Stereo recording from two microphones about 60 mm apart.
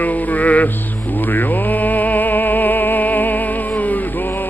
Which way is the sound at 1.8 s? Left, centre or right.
Left.